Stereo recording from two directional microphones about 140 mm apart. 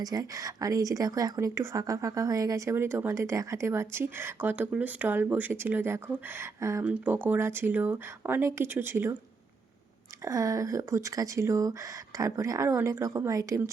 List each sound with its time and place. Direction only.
0.0 s speech: 25° right (ahead or behind)
6.8 s speech: 10° right (ahead or behind)
10.2 s speech: 25° right (ahead or behind)